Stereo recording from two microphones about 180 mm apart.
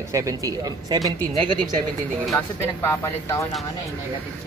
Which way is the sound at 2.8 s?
15° left (ahead or behind).